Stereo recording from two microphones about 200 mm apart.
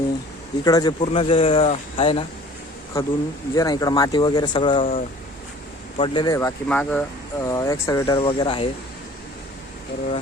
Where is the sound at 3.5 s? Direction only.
15° left (ahead or behind).